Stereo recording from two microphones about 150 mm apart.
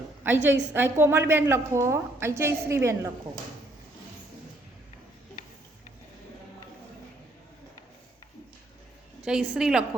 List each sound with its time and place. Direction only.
0.2 s a woman's voice: 15° right (ahead or behind)
9.2 s a woman's voice: 5° right (ahead or behind)